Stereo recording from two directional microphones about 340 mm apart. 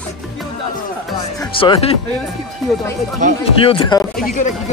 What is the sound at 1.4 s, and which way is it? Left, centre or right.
Speech, centre.